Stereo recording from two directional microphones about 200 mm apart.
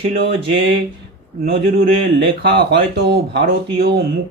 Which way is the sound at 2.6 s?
55° right (ahead or behind).